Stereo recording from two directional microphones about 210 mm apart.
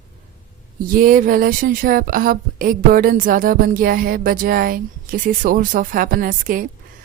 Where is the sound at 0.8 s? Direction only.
40° right (ahead or behind).